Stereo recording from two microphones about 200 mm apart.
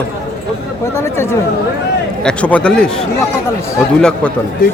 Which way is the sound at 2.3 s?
5° left (ahead or behind).